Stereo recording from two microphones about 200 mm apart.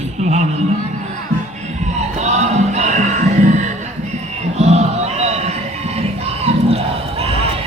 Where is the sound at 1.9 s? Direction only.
35° right (ahead or behind).